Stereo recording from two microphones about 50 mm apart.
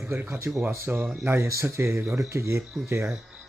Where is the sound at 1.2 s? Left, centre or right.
Right.